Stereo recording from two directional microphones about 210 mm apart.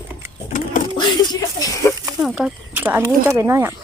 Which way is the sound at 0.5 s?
40° left (ahead or behind).